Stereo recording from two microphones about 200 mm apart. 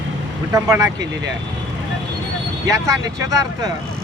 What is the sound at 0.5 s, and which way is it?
Speech, 15° right (ahead or behind).